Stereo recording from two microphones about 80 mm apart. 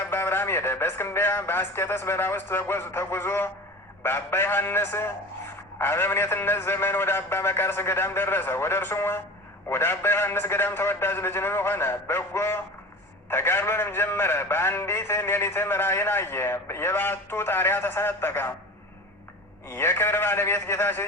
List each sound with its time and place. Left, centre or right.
0.0 s a man's voice: left
19.6 s a man's voice: left